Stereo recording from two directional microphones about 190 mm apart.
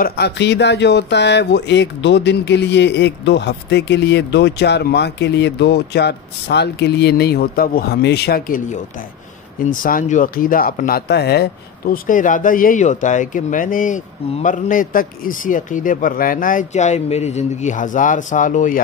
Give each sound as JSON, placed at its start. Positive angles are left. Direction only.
{"t": 0.0, "sound": "speech", "side_deg": 60}